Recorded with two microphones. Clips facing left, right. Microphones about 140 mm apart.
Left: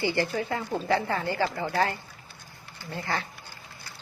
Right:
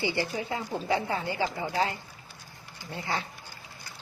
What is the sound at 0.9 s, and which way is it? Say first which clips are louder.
Speech: left 2 dB; 15° right (ahead or behind).